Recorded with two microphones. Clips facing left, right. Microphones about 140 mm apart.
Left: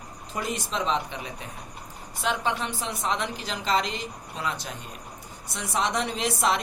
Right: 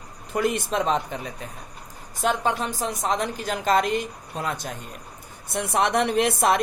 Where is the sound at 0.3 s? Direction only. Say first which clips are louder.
Right 6 dB; 55° right (ahead or behind).